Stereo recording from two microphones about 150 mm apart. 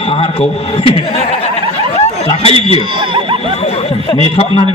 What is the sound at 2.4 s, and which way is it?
Speech, 40° left (ahead or behind).